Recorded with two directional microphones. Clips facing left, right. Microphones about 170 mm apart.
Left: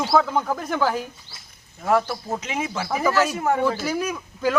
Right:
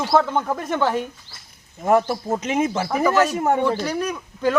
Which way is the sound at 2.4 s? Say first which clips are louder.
Right 6 dB; 45° right (ahead or behind).